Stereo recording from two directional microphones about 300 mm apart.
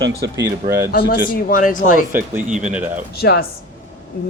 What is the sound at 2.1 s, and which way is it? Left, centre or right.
Speech, centre.